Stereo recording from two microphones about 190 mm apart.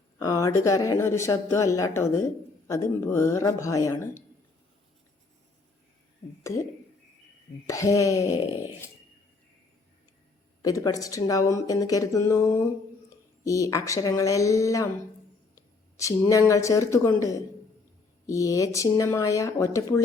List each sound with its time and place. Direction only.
0.2 s speech: 20° left (ahead or behind)
6.4 s speech: 15° left (ahead or behind)
7.7 s speech: 15° left (ahead or behind)
10.6 s speech: 20° left (ahead or behind)
15.5 s a sound: 15° left (ahead or behind)
16.5 s speech: 15° left (ahead or behind)